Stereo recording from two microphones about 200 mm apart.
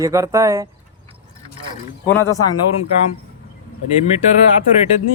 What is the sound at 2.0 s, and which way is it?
Speech, 10° left (ahead or behind).